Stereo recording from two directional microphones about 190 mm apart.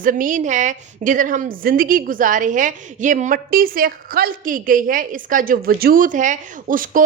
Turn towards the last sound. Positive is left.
turn(degrees=-45)  # may be behind; listen again after turning